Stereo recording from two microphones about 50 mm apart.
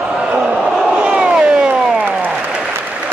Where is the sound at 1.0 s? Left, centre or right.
Right.